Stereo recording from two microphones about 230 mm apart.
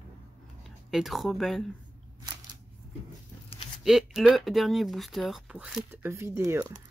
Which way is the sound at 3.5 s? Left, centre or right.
Left.